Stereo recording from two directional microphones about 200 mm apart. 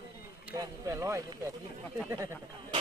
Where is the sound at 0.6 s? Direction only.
15° right (ahead or behind).